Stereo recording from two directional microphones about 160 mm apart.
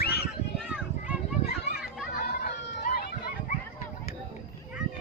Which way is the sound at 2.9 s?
75° left (ahead or behind).